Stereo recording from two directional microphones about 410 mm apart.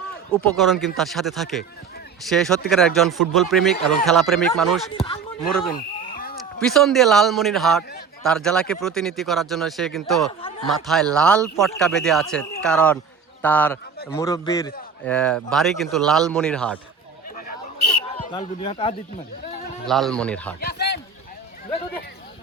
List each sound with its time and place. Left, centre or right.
0.3 s speech: centre
4.9 s speech: centre
6.6 s speech: centre
18.3 s speech: centre
19.9 s speech: centre
20.6 s a sound: left